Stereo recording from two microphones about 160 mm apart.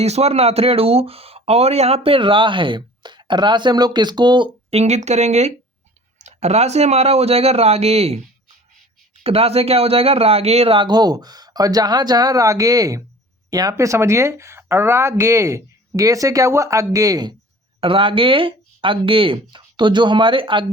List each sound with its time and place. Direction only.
0.0 s speech: 40° right (ahead or behind)
4.7 s speech: 45° right (ahead or behind)
9.2 s speech: 40° right (ahead or behind)